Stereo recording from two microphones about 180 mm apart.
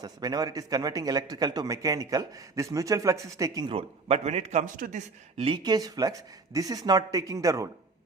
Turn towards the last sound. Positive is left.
turn(degrees=-20)  # may be behind; listen again after turning